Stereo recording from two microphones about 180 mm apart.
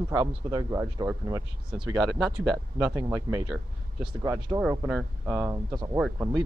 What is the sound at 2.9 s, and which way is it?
Speech, 15° right (ahead or behind).